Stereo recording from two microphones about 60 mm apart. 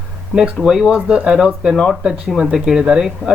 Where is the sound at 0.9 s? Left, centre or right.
Centre.